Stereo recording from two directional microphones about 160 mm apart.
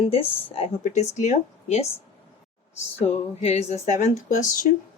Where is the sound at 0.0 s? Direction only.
35° left (ahead or behind).